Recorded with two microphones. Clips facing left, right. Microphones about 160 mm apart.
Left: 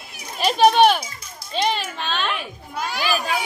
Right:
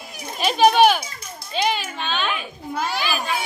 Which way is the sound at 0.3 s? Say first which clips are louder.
Even; centre (ahead or behind).